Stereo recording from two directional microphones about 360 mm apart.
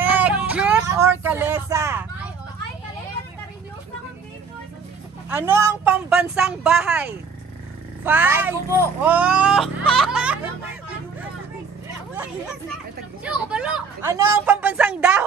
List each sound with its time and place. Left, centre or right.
0.0 s child singing: centre
5.3 s speech: centre
13.2 s speech: centre